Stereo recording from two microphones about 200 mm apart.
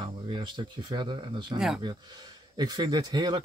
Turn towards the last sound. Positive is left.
turn(degrees=-20)  # may be behind; listen again after turning